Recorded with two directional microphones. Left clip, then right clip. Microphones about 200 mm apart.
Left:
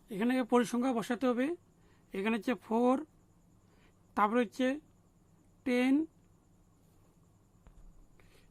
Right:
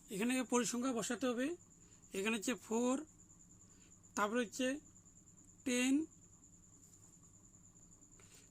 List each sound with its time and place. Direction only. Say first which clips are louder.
0.1 s speech: left 7 dB; 20° left (ahead or behind)
2.1 s speech: left 5 dB; 20° left (ahead or behind)
4.1 s speech: left 8 dB; 20° left (ahead or behind)
4.4 s speech: left 7 dB; 35° left (ahead or behind)
5.6 s speech: left 6 dB; 15° left (ahead or behind)